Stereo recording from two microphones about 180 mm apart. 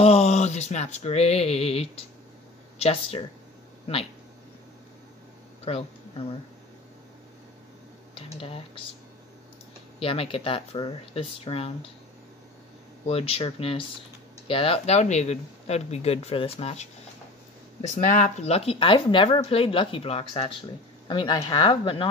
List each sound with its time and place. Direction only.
0.0 s speech: 35° left (ahead or behind)
5.7 s speech: 35° left (ahead or behind)
8.4 s speech: 30° left (ahead or behind)
9.9 s speech: 30° left (ahead or behind)
13.0 s speech: 30° left (ahead or behind)
17.8 s speech: 45° left (ahead or behind); by 22.1 s 30° left (ahead or behind)